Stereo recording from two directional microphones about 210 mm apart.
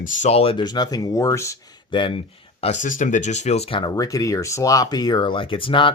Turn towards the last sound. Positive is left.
turn(degrees=25)  # may be behind; listen again after turning